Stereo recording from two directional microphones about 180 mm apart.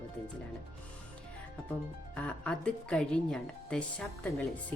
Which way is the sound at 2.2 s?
5° left (ahead or behind).